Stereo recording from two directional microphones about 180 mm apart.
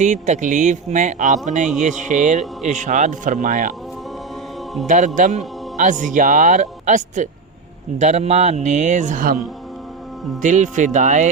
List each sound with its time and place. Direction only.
0.0 s a man's voice: 40° right (ahead or behind)
4.9 s a man's voice: 45° right (ahead or behind)
10.4 s a man's voice: 45° right (ahead or behind)